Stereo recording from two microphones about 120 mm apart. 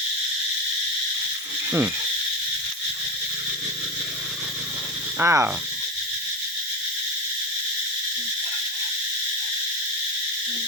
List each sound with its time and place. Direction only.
5.2 s speech: 20° right (ahead or behind)